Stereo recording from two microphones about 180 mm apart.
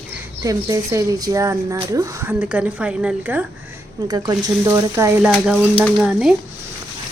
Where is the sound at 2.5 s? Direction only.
5° right (ahead or behind).